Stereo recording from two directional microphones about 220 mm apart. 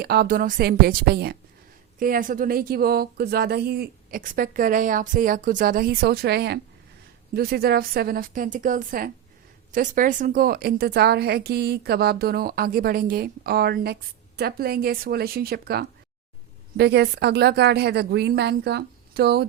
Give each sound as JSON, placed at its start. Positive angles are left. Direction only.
{"t": 0.0, "sound": "a woman's voice", "side_deg": -45}